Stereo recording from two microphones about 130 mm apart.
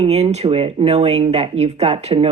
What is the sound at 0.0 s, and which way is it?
Speech, 55° right (ahead or behind).